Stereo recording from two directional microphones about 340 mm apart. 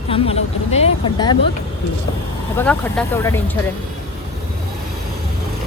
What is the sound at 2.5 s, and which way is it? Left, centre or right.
Speech, centre.